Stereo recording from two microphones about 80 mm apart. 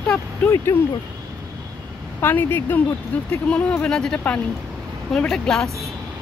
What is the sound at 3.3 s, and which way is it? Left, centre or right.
Speech, centre.